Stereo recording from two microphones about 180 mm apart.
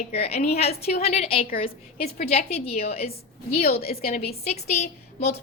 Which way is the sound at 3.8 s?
55° left (ahead or behind).